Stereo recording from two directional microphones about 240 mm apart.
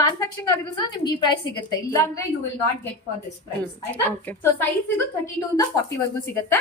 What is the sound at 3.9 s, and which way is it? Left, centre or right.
Speech, centre.